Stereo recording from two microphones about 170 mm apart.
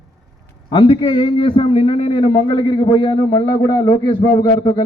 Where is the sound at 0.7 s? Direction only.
30° left (ahead or behind).